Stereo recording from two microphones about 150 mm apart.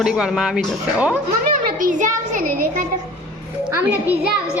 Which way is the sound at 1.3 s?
70° right (ahead or behind).